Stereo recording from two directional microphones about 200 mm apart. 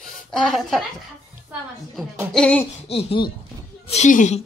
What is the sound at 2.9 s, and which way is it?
Speech, 25° left (ahead or behind).